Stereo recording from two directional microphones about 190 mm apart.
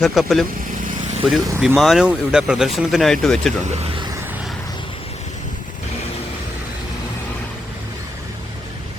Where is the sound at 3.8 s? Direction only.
30° right (ahead or behind).